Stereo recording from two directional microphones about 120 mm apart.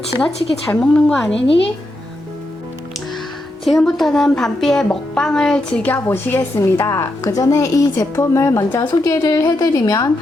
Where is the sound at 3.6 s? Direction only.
Centre (ahead or behind).